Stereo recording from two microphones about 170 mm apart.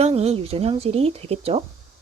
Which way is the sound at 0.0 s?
40° right (ahead or behind).